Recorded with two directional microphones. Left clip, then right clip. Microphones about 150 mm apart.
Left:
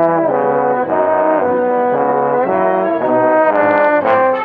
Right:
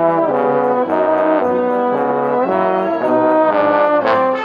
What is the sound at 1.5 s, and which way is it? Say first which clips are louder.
Brass instrument: left 2 dB; 20° right (ahead or behind).